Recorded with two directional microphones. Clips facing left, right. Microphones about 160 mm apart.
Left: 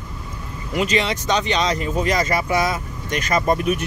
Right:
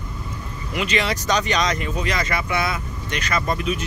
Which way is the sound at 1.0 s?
25° left (ahead or behind).